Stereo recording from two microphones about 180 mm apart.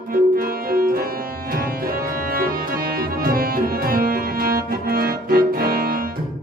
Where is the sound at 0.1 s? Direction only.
55° right (ahead or behind).